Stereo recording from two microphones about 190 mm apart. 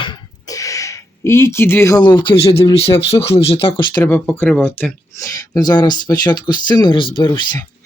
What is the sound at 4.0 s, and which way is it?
Speech, 10° left (ahead or behind).